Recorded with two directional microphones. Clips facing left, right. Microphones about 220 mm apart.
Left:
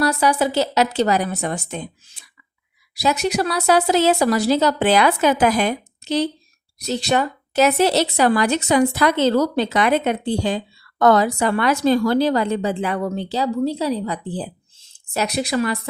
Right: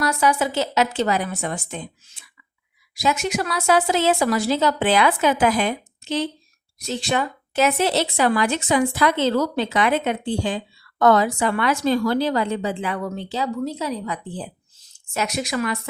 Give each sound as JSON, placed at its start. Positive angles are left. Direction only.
{"t": 0.0, "sound": "speech", "side_deg": 35}